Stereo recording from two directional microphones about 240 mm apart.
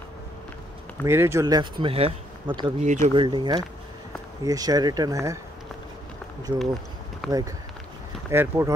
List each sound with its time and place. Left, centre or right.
1.0 s speech: centre
7.2 s speech: centre
8.3 s speech: centre